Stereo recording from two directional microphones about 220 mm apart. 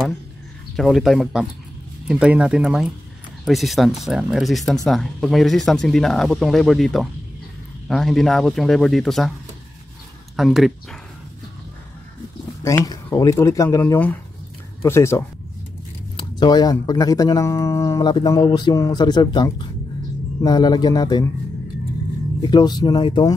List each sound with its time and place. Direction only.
0.7 s speech: centre (ahead or behind)
10.3 s speech: centre (ahead or behind)
12.6 s speech: 15° left (ahead or behind)
16.3 s speech: 20° left (ahead or behind)
22.4 s speech: 20° left (ahead or behind)